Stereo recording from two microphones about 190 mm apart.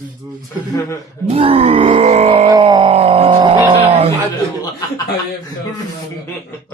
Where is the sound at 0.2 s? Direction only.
25° right (ahead or behind).